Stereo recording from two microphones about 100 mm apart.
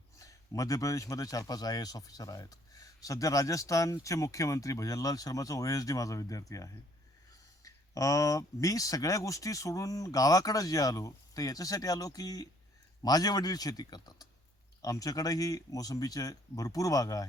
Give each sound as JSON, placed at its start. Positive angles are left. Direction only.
{"t": 0.2, "sound": "speech", "side_deg": 35}